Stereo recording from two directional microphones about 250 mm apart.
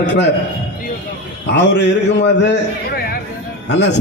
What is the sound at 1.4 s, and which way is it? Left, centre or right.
A man's voice, left.